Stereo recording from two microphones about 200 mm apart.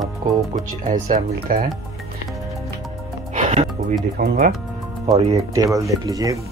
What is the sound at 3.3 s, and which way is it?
Music, 30° right (ahead or behind).